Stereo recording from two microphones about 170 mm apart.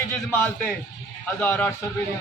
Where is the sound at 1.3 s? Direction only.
10° left (ahead or behind).